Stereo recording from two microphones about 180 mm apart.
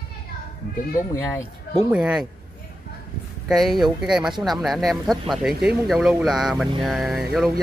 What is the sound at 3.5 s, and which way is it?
Speech, centre (ahead or behind).